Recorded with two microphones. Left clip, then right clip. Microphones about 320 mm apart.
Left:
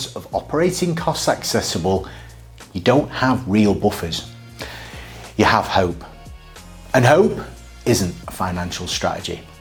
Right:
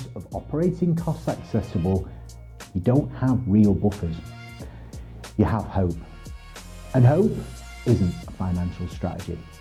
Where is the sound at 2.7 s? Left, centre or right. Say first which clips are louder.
Left 8 dB; centre.